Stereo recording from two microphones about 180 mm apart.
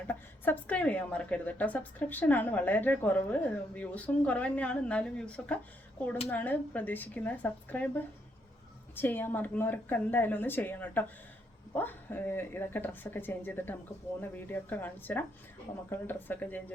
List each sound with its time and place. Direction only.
0.1 s a woman's voice: 10° left (ahead or behind)